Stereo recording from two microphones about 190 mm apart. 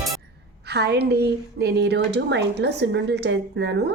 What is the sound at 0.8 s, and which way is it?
A woman's voice, 60° right (ahead or behind).